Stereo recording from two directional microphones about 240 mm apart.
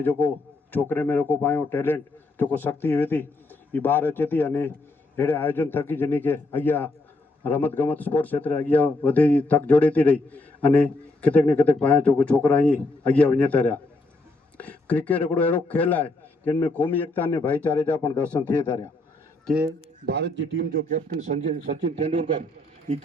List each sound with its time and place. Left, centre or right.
0.0 s a man's voice: centre
19.5 s speech: centre
20.1 s speech: right
21.2 s a man's voice: right